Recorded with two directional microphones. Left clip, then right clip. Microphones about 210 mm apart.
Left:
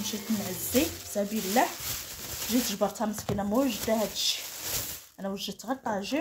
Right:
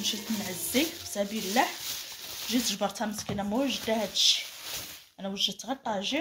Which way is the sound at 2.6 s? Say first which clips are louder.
Left 1 dB; 30° left (ahead or behind).